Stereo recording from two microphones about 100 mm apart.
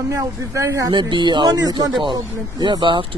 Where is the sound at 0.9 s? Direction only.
50° right (ahead or behind).